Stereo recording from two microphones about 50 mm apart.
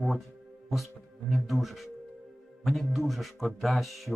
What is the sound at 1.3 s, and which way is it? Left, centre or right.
Speech, centre.